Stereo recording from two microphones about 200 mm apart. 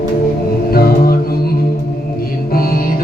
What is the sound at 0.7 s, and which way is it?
Music, 50° left (ahead or behind).